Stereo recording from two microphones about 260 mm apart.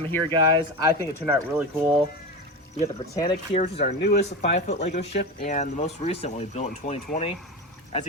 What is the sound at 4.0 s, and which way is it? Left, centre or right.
Speech, left.